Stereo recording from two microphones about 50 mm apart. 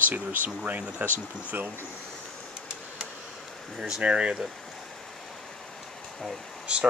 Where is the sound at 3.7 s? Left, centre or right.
Centre.